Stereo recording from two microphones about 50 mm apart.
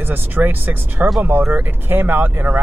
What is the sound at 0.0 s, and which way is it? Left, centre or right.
Speech, right.